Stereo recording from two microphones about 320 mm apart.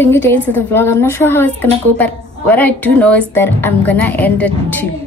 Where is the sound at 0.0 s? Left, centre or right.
Centre.